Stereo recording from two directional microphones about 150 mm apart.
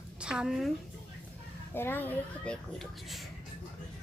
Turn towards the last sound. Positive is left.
turn(degrees=0)  # may be behind; listen again after turning